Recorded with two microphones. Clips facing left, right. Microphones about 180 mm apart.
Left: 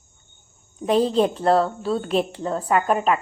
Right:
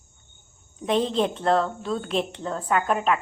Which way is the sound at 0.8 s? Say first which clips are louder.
Left 4 dB; 35° left (ahead or behind).